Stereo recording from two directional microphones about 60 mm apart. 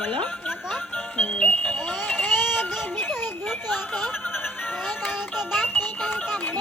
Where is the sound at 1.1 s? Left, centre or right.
Left.